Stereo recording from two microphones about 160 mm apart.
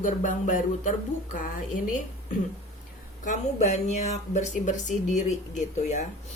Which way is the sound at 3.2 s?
50° left (ahead or behind).